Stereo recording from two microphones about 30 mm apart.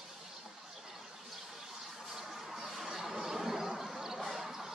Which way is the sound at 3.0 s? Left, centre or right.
Centre.